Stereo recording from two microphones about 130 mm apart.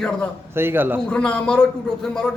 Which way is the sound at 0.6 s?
15° right (ahead or behind).